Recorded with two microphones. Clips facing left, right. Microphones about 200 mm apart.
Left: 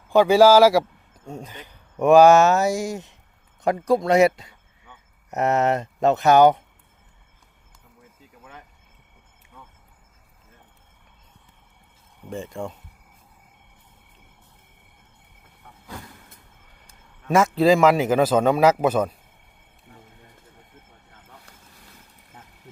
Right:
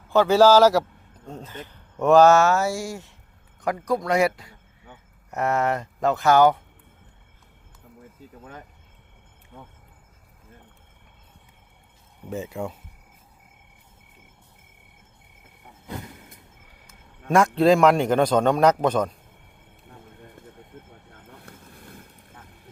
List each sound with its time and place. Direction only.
0.1 s speech: 15° left (ahead or behind)
8.4 s speech: 40° right (ahead or behind)
12.3 s speech: 5° right (ahead or behind)
17.2 s a man's voice: centre (ahead or behind)
21.1 s boat: 55° right (ahead or behind)